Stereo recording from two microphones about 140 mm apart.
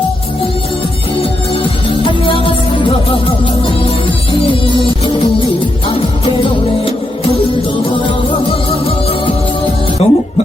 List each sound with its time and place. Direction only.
2.0 s music: 40° left (ahead or behind)
3.8 s music: 40° left (ahead or behind)
10.0 s music: 45° left (ahead or behind)